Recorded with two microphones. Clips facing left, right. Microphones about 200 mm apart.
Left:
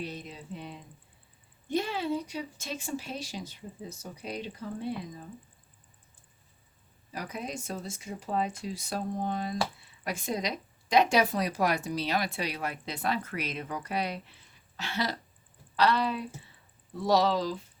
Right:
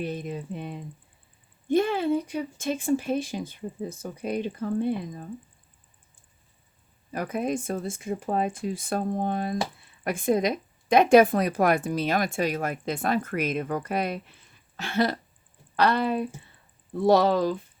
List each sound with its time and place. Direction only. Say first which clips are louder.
0.0 s speech: right 8 dB; 55° right (ahead or behind)
7.1 s speech: right 9 dB; 55° right (ahead or behind)